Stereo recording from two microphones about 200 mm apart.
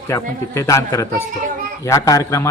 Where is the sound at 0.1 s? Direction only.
15° left (ahead or behind).